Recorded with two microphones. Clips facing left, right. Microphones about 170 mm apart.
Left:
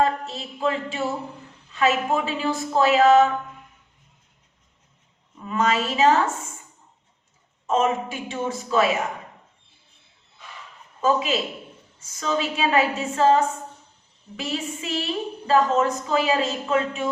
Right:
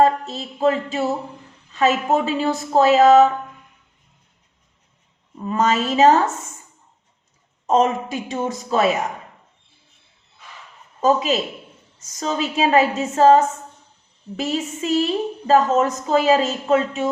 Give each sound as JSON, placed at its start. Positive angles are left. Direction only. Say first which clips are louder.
{"t": 0.0, "sound": "a woman's voice", "louder": "right 5 dB", "side_deg": -40}
{"t": 5.4, "sound": "a woman's voice", "louder": "right 3 dB", "side_deg": -35}
{"t": 7.7, "sound": "a woman's voice", "louder": "right 4 dB", "side_deg": -40}
{"t": 11.0, "sound": "a woman's voice", "louder": "right 4 dB", "side_deg": -40}